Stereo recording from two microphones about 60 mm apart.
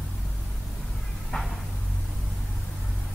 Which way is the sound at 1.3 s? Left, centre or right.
Centre.